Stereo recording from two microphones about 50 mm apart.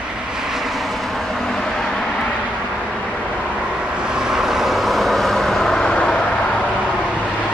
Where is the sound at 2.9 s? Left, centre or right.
Centre.